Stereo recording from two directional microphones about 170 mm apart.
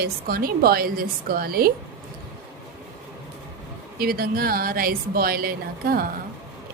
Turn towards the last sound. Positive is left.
turn(degrees=-60)  # may be behind; listen again after turning